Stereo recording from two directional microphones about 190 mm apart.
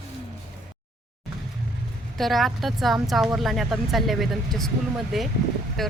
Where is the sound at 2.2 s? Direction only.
Centre (ahead or behind).